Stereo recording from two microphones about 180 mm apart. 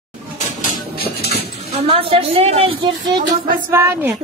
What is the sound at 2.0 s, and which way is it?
A woman's voice, 30° right (ahead or behind).